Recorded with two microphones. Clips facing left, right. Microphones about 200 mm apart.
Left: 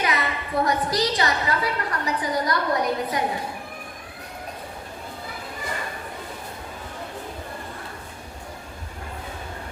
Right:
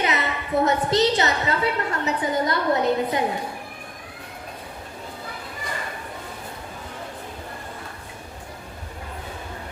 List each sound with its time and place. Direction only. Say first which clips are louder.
0.0 s a woman's voice: right 1 dB; 25° right (ahead or behind)